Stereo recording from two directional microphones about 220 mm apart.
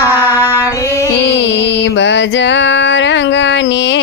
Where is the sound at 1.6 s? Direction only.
50° left (ahead or behind).